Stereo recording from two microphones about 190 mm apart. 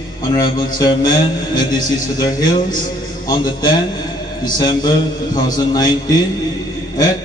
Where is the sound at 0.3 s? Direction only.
25° left (ahead or behind).